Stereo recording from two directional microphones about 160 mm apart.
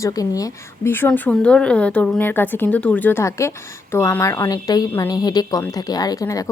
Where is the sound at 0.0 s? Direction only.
20° left (ahead or behind).